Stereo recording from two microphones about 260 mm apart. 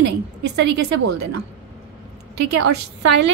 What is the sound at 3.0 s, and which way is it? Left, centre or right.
Speech, right.